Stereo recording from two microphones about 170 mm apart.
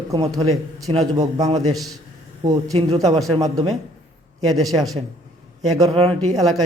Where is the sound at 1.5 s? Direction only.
40° right (ahead or behind).